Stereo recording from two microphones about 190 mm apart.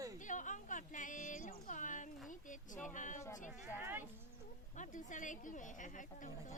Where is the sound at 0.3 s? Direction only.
40° left (ahead or behind).